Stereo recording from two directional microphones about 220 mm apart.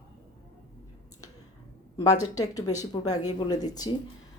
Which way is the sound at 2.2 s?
15° left (ahead or behind).